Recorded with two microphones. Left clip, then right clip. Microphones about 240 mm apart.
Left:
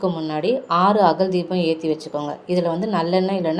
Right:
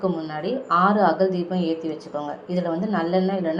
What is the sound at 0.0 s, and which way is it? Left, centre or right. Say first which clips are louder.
Speech: left 4 dB; left.